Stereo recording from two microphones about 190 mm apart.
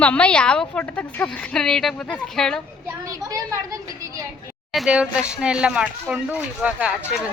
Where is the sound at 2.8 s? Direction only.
15° right (ahead or behind).